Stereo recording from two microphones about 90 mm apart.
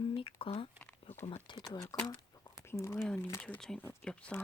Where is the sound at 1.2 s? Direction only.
75° left (ahead or behind).